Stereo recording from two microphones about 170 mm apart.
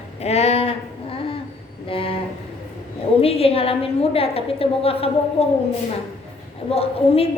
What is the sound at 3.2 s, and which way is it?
A woman's voice, 35° left (ahead or behind).